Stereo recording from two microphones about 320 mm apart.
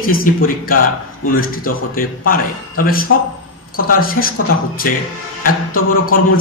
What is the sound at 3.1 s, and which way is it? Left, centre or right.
A man's voice, left.